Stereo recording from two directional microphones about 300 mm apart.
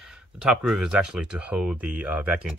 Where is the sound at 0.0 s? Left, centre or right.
Centre.